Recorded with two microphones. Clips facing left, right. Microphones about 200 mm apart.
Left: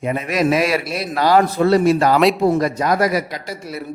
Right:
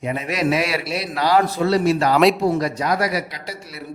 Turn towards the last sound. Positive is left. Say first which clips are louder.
# left 6 dB
turn(degrees=45)  # may be behind; listen again after turning